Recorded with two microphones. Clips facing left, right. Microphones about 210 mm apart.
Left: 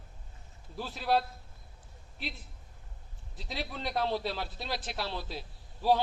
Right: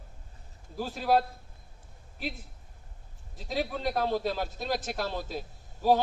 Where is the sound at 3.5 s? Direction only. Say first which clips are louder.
Right 5 dB; 45° right (ahead or behind).